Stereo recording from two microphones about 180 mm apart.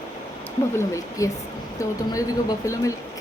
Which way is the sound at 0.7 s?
15° left (ahead or behind).